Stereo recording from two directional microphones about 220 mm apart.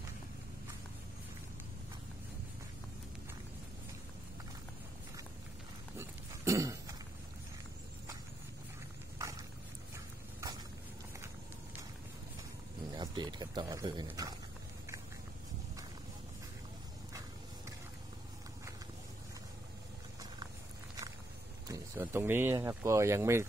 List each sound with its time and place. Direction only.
5.9 s livestock: 15° right (ahead or behind)
12.9 s speech: 20° right (ahead or behind)
21.6 s speech: 15° right (ahead or behind)